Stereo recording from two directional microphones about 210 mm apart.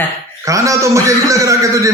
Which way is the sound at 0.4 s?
15° right (ahead or behind).